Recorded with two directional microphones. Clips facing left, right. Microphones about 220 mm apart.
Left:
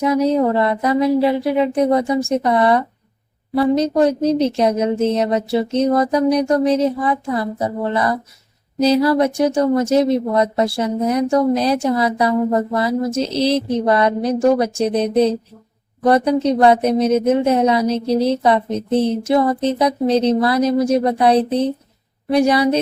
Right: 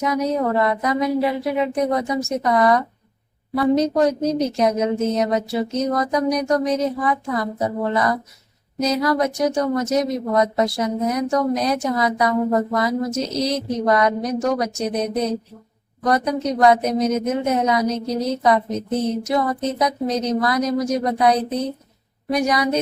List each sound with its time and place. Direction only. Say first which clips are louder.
0.0 s speech: left 5 dB; 30° left (ahead or behind)
8.8 s a woman's voice: left 5 dB; 30° left (ahead or behind)